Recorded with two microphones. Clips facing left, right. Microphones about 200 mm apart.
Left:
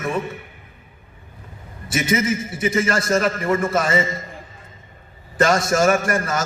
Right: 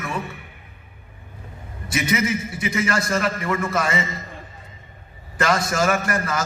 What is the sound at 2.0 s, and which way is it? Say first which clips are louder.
Speech: left 2 dB; 50° left (ahead or behind).